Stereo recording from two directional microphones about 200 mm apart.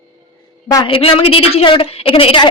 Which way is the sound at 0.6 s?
20° left (ahead or behind).